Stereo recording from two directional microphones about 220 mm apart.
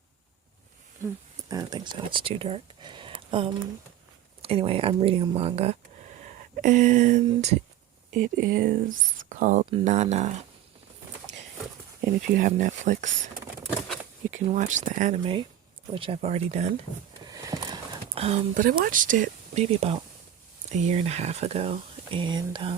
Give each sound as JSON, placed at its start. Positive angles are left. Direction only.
{"t": 1.5, "sound": "speech", "side_deg": -20}
{"t": 12.0, "sound": "speech", "side_deg": -35}
{"t": 13.7, "sound": "a sound", "side_deg": 0}
{"t": 14.3, "sound": "speech", "side_deg": -35}
{"t": 17.2, "sound": "a sound", "side_deg": -15}
{"t": 18.1, "sound": "speech", "side_deg": -30}